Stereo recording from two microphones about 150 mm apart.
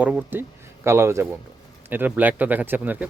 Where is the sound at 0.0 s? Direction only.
10° right (ahead or behind).